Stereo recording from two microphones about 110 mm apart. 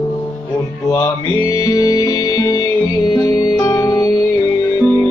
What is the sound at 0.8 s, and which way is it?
Music, 25° left (ahead or behind).